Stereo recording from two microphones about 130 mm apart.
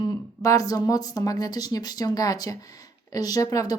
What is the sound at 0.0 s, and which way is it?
Speech, 30° left (ahead or behind).